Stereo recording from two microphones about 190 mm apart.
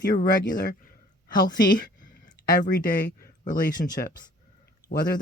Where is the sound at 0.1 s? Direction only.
45° left (ahead or behind).